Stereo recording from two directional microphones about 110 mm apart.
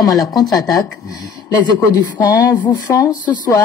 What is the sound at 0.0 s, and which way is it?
Speech, 35° left (ahead or behind).